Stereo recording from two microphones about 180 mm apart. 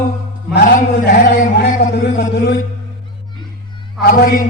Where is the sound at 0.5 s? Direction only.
55° left (ahead or behind).